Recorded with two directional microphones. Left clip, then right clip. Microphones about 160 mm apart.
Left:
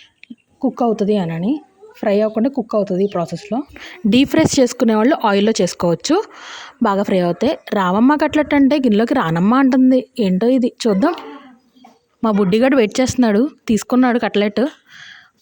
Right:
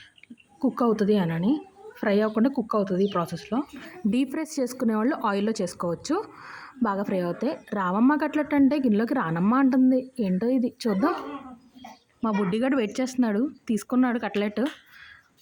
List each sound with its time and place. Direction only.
0.6 s a woman's voice: 25° left (ahead or behind)
3.8 s a woman's voice: 60° left (ahead or behind)
12.2 s a woman's voice: 55° left (ahead or behind)